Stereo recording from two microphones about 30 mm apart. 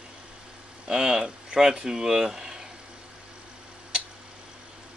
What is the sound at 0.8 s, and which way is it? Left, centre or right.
Speech, centre.